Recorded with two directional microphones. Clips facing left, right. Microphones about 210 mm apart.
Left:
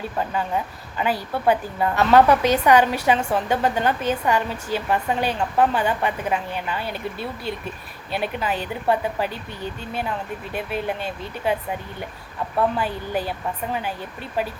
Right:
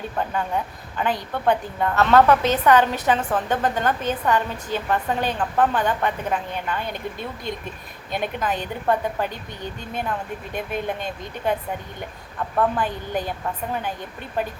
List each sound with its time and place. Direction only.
0.2 s a woman's voice: 5° left (ahead or behind)
10.5 s a woman's voice: 5° left (ahead or behind)
12.5 s a woman's voice: 10° left (ahead or behind)